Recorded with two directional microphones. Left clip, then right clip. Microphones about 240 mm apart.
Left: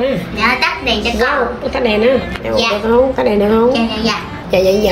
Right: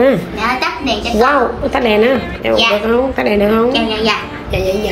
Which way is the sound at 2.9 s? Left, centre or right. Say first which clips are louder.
Left 2 dB; centre.